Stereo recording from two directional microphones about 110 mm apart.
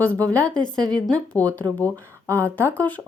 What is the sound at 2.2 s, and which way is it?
Speech, 25° right (ahead or behind).